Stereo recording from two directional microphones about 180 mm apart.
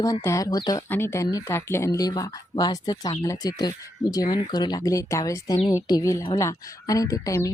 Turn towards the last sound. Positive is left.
turn(degrees=20)  # may be behind; listen again after turning